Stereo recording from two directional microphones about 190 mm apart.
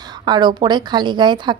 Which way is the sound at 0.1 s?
20° right (ahead or behind).